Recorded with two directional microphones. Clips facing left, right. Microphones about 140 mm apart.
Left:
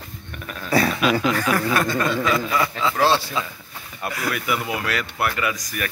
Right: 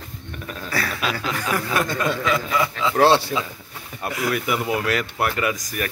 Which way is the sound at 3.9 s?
20° right (ahead or behind).